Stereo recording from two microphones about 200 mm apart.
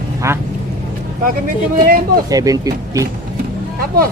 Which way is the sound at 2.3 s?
15° right (ahead or behind).